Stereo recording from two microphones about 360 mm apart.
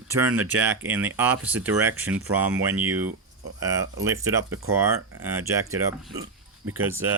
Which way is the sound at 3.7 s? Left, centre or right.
Centre.